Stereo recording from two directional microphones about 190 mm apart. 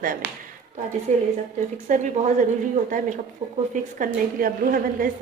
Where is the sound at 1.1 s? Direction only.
40° right (ahead or behind).